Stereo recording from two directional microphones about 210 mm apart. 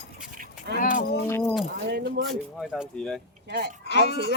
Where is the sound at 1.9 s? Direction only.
50° right (ahead or behind).